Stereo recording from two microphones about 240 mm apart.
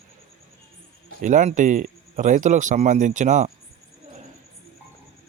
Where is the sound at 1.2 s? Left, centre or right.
Right.